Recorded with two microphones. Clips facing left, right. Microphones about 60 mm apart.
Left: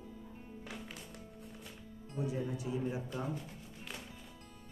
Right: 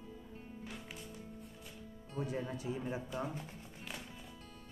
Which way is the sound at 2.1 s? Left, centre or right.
Right.